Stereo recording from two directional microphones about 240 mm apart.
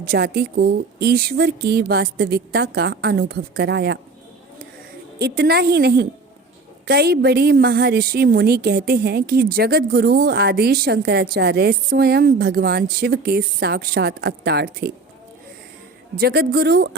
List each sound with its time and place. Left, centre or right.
0.0 s a woman's voice: right
5.2 s a woman's voice: right
16.1 s a woman's voice: right